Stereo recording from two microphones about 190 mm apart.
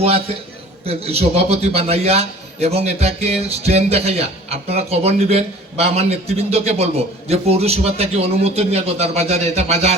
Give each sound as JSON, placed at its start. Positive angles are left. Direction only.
{"t": 0.9, "sound": "a man's voice", "side_deg": -30}